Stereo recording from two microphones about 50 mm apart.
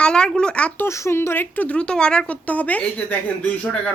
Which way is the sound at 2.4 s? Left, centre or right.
Left.